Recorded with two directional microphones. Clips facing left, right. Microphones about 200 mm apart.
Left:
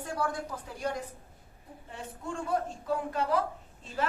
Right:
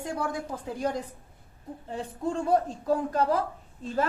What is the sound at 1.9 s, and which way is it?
Speech, 35° right (ahead or behind).